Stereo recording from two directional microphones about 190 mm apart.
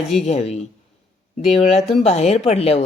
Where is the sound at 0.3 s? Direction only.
35° left (ahead or behind).